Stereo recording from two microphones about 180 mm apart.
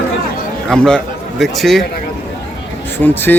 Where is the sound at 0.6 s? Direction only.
5° left (ahead or behind).